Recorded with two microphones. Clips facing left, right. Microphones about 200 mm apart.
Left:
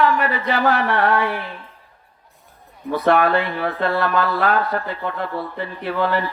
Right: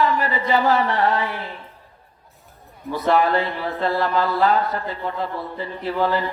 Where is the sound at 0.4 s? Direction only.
65° left (ahead or behind).